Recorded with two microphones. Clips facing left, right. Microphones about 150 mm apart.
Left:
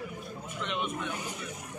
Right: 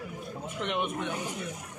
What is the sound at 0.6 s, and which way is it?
Speech, 60° right (ahead or behind).